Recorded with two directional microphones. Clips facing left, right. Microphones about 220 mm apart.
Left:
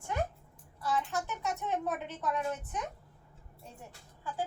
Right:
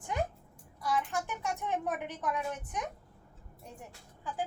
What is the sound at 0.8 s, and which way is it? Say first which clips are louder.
A woman's voice: even; 10° right (ahead or behind).